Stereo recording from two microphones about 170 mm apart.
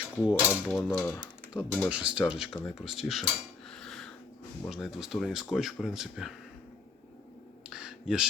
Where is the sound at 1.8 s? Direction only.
5° right (ahead or behind).